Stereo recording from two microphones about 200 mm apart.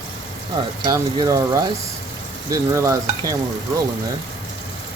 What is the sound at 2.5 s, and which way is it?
Stir, 15° right (ahead or behind).